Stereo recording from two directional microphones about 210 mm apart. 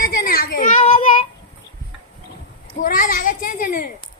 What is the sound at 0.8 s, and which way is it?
Child singing, 25° left (ahead or behind).